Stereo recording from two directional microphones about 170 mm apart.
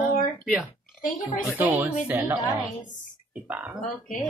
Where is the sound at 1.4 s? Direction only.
10° right (ahead or behind).